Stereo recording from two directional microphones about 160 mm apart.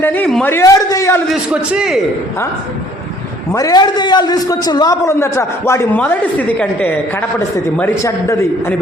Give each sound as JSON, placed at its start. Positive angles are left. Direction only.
{"t": 0.0, "sound": "a man's voice", "side_deg": 10}
{"t": 1.3, "sound": "a man's voice", "side_deg": -5}
{"t": 3.5, "sound": "a man's voice", "side_deg": 25}